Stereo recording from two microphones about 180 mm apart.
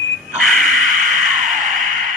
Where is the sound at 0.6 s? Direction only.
45° right (ahead or behind).